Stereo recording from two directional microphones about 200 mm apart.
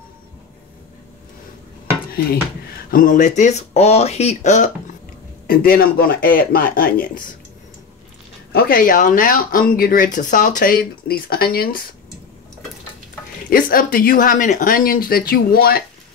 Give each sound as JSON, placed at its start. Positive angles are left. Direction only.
{"t": 2.9, "sound": "speech", "side_deg": 40}
{"t": 5.5, "sound": "speech", "side_deg": 45}
{"t": 8.5, "sound": "speech", "side_deg": 50}
{"t": 13.5, "sound": "speech", "side_deg": 45}